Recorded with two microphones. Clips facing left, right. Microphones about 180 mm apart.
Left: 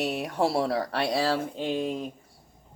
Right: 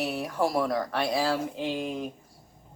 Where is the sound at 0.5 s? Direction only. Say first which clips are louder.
Left 1 dB; 30° left (ahead or behind).